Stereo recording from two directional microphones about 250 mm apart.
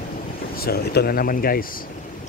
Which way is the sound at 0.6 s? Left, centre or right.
Left.